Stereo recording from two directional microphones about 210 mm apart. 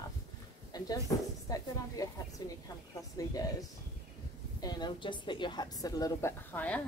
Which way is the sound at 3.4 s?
15° left (ahead or behind).